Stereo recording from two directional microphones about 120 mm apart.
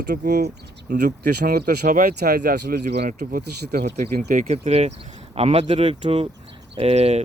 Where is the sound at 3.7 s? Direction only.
85° right; by 7.2 s 65° right (ahead or behind).